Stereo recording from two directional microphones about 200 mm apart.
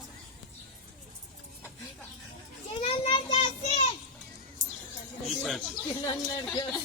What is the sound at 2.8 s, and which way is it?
Child singing, 30° left (ahead or behind).